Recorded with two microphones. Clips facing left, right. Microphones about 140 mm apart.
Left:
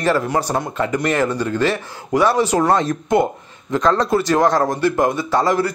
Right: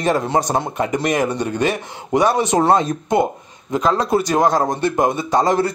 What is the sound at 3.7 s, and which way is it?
A man's voice, 10° right (ahead or behind).